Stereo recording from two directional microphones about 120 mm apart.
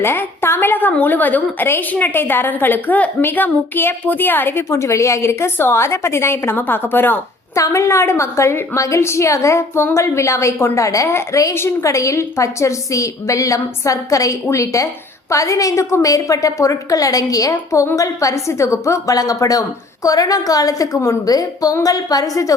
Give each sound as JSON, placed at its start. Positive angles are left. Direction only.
{"t": 0.0, "sound": "a woman's voice", "side_deg": 20}